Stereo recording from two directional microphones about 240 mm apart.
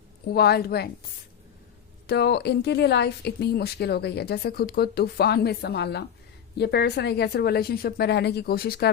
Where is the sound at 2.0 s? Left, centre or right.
Left.